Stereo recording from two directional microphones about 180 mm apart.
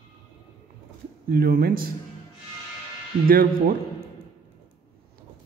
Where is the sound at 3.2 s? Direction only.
55° right (ahead or behind).